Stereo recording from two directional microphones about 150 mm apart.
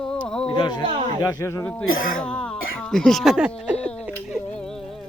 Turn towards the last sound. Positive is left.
turn(degrees=-5)  # may be behind; listen again after turning